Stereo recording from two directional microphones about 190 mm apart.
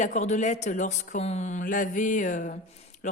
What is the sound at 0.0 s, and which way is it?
Speech, 40° left (ahead or behind).